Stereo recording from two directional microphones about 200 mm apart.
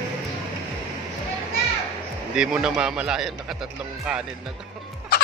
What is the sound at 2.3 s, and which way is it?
Speech, 5° right (ahead or behind).